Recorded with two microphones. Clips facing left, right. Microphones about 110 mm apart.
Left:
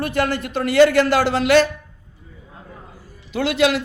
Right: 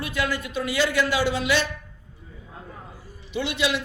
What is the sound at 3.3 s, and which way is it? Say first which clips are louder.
Speech: left 7 dB; 90° left.